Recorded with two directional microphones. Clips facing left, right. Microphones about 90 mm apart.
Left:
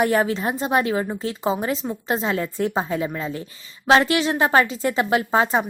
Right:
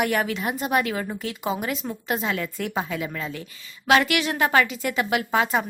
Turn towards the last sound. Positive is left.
turn(degrees=30)  # may be behind; listen again after turning